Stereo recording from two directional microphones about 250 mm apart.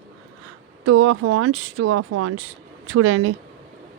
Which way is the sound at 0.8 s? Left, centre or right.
Right.